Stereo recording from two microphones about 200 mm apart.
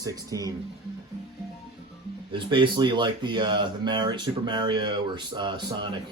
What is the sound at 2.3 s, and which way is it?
Speech, 25° right (ahead or behind).